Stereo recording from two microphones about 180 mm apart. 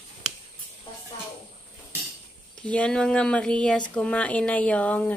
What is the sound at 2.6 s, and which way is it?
Speech, 5° left (ahead or behind).